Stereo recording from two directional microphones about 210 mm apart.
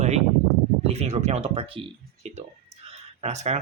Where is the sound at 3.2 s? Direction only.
30° right (ahead or behind).